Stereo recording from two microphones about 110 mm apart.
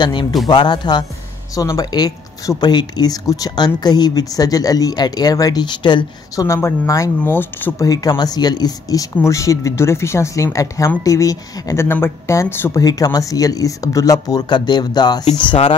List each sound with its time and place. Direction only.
0.0 s speech: 45° left (ahead or behind)
6.3 s speech: 25° left (ahead or behind)
7.8 s speech: 35° left (ahead or behind)
12.8 s speech: 35° left (ahead or behind)
15.3 s speech: 50° left (ahead or behind)